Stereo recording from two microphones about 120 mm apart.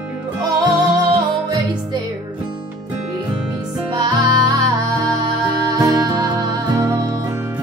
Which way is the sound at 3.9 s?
35° right (ahead or behind).